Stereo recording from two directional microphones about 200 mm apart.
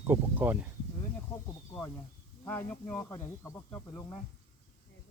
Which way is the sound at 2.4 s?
10° left (ahead or behind).